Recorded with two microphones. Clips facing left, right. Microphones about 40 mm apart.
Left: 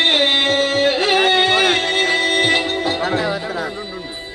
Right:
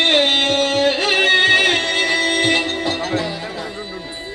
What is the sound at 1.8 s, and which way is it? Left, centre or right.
Music, centre.